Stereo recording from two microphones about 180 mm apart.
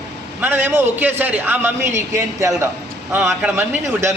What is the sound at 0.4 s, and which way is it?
Speech, 10° right (ahead or behind).